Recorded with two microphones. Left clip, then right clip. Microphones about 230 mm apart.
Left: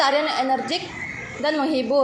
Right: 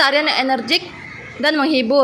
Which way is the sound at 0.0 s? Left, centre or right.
Right.